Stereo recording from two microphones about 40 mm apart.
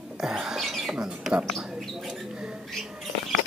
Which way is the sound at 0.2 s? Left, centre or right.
Centre.